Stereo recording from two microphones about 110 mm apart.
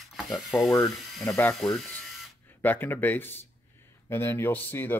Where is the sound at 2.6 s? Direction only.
15° left (ahead or behind).